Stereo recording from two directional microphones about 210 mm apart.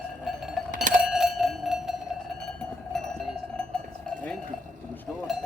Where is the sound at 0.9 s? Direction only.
Centre (ahead or behind).